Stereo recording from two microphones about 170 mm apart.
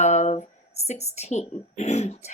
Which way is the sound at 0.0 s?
40° left (ahead or behind).